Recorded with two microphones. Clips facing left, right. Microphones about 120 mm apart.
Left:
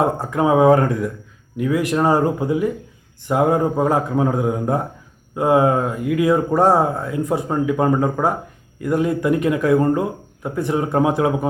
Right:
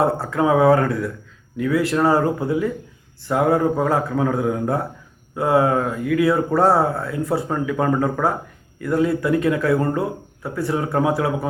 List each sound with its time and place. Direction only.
0.0 s speech: 15° left (ahead or behind)